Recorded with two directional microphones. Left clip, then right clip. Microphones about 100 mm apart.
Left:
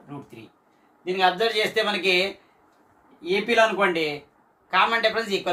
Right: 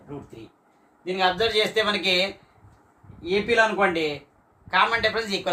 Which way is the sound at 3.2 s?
15° right (ahead or behind).